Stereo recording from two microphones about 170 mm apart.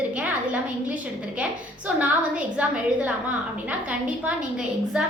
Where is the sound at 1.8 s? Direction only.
10° right (ahead or behind).